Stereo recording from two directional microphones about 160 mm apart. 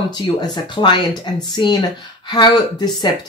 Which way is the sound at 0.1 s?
30° left (ahead or behind).